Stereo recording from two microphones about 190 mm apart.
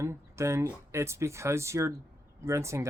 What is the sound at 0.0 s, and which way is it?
Speech, 15° right (ahead or behind).